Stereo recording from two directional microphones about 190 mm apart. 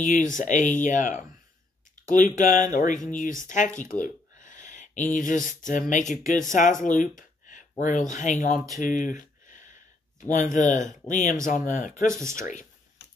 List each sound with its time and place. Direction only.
0.0 s speech: 40° left (ahead or behind)
8.8 s a sound: 45° left (ahead or behind)
10.3 s speech: 40° left (ahead or behind)